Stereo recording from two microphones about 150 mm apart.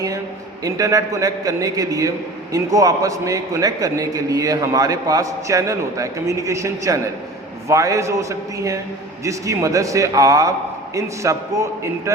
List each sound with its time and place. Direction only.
0.6 s a man's voice: 25° right (ahead or behind)